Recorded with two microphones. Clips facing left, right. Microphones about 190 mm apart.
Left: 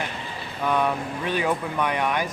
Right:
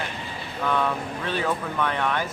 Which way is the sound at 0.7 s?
15° left (ahead or behind).